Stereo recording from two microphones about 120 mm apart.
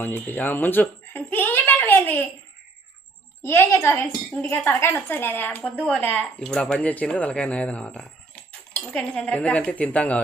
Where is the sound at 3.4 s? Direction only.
20° left (ahead or behind).